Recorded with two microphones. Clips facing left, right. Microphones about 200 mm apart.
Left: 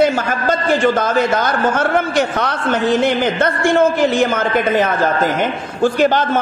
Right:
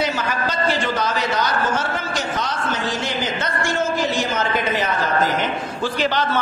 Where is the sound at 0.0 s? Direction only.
50° left (ahead or behind).